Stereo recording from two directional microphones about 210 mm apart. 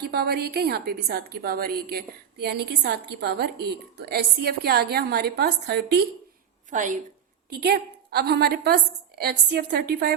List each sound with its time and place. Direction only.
0.1 s a woman's voice: 50° right (ahead or behind)
6.7 s a woman's voice: 40° right (ahead or behind)
7.5 s a woman's voice: 50° right (ahead or behind)